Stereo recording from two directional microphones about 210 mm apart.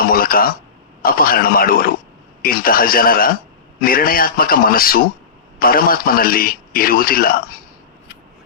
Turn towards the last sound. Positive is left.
turn(degrees=45)  # may be behind; listen again after turning